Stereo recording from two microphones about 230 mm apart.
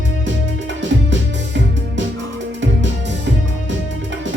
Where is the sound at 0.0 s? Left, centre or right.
Right.